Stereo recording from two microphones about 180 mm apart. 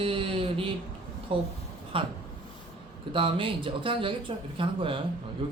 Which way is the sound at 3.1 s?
30° right (ahead or behind).